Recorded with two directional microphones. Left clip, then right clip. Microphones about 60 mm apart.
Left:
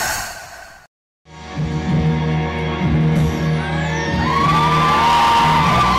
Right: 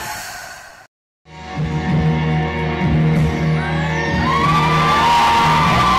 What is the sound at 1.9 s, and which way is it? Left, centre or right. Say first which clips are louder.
Music: right 1 dB; left.